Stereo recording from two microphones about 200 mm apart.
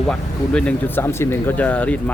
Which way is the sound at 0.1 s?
5° left (ahead or behind).